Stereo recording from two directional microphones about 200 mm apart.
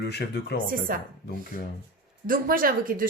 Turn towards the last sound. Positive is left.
turn(degrees=-45)  # may be behind; listen again after turning